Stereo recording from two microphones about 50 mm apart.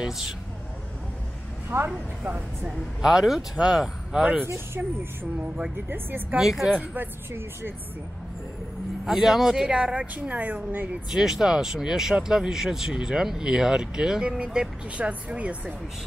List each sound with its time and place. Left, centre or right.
1.7 s speech: right
2.2 s speech: right
3.0 s speech: centre
5.9 s speech: right
6.4 s speech: centre
6.8 s speech: right
9.0 s speech: centre; by 11.0 s right
11.1 s speech: centre; by 15.7 s right